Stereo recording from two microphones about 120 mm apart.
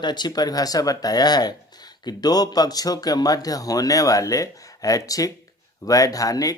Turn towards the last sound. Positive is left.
turn(degrees=30)  # may be behind; listen again after turning